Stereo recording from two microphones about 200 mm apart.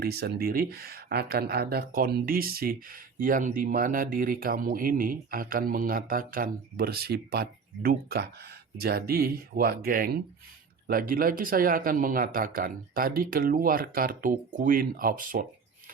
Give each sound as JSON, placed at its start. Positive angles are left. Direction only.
{"t": 0.0, "sound": "speech", "side_deg": -50}